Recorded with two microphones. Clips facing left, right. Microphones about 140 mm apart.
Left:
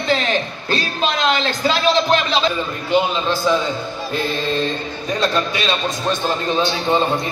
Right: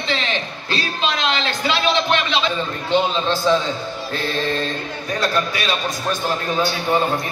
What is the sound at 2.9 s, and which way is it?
Mantra, 10° left (ahead or behind).